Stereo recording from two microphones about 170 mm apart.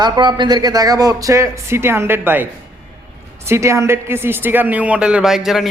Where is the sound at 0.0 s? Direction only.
25° right (ahead or behind).